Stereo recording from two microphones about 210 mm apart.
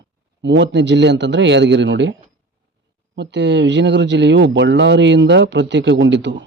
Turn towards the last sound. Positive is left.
turn(degrees=-60)  # may be behind; listen again after turning